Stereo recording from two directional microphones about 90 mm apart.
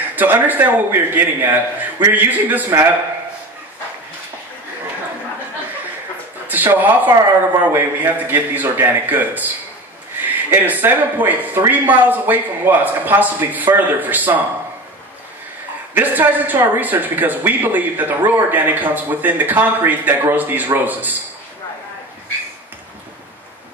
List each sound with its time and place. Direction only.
0.1 s a man's voice: 20° right (ahead or behind)
6.4 s a man's voice: 20° right (ahead or behind)
15.9 s a man's voice: 20° right (ahead or behind)